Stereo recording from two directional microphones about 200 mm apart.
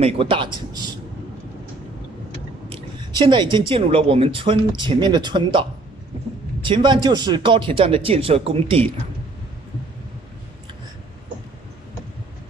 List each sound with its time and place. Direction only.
0.0 s a man's voice: 25° right (ahead or behind)
2.7 s a woman's voice: 20° right (ahead or behind)